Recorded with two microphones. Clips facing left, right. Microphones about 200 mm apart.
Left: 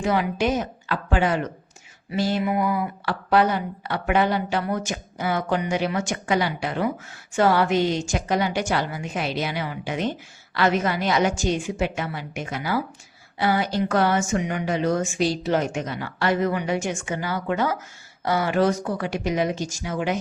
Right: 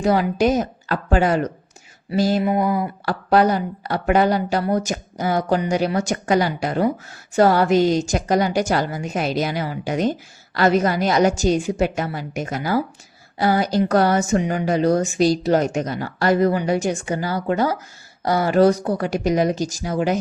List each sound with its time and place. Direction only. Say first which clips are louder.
0.0 s a woman's voice: right 5 dB; 40° right (ahead or behind)